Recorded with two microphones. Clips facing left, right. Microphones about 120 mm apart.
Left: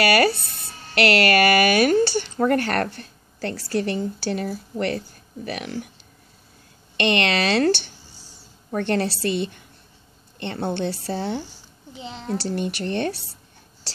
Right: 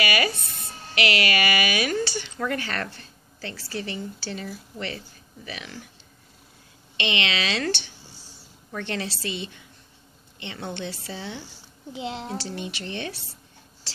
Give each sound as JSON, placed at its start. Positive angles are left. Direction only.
{"t": 0.0, "sound": "speech", "side_deg": 40}
{"t": 0.9, "sound": "a woman's voice", "side_deg": 60}
{"t": 7.0, "sound": "a woman's voice", "side_deg": 55}
{"t": 12.0, "sound": "a woman's voice", "side_deg": -15}
{"t": 12.4, "sound": "a woman's voice", "side_deg": 50}